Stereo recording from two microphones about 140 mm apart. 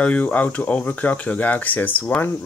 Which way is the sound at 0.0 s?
10° left (ahead or behind).